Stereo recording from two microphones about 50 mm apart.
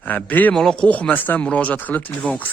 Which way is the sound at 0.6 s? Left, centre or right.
Centre.